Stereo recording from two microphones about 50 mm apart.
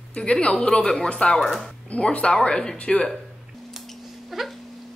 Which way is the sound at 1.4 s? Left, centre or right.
Centre.